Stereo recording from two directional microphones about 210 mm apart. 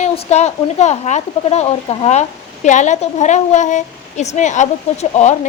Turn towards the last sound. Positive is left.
turn(degrees=30)  # may be behind; listen again after turning